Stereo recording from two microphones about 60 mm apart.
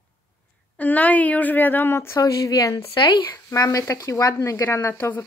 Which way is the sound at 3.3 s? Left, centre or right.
Left.